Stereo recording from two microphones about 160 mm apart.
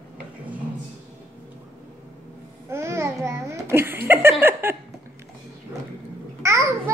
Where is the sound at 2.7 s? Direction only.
15° right (ahead or behind).